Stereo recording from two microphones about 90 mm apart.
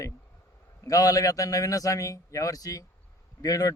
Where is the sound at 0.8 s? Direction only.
40° left (ahead or behind).